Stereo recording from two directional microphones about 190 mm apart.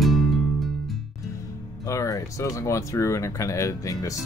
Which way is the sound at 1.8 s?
15° left (ahead or behind).